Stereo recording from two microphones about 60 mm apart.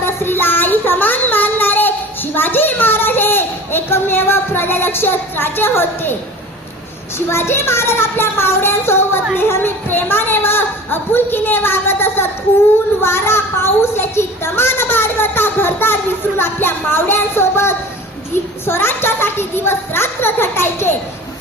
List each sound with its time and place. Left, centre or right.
0.0 s child singing: left
2.3 s speech: left
7.3 s a child's voice: left